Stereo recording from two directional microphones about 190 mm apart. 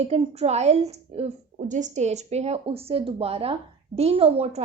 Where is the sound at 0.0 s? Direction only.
35° right (ahead or behind).